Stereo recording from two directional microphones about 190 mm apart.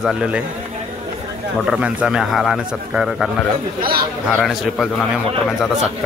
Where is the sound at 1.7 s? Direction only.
5° right (ahead or behind).